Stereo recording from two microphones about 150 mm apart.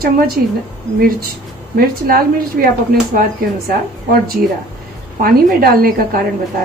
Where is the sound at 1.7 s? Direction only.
80° right.